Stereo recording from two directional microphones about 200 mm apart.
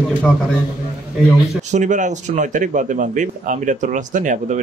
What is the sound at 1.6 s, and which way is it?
Speech, 35° right (ahead or behind).